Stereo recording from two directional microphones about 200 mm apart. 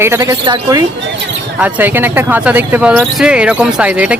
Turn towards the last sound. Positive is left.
turn(degrees=-5)  # may be behind; listen again after turning